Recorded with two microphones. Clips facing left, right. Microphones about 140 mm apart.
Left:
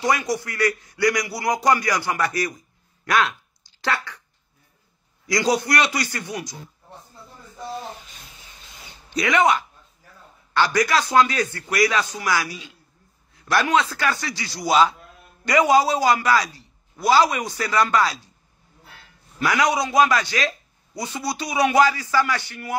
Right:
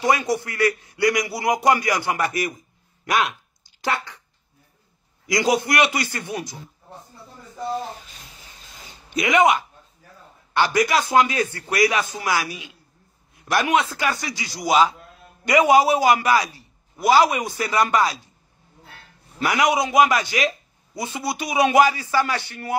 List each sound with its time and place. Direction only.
0.0 s a man's voice: 25° right (ahead or behind)
5.2 s a man's voice: 20° right (ahead or behind)
9.1 s a man's voice: 20° right (ahead or behind)
19.3 s a man's voice: 20° right (ahead or behind)